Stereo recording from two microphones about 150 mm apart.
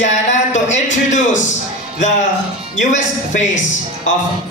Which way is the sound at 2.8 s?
55° left (ahead or behind).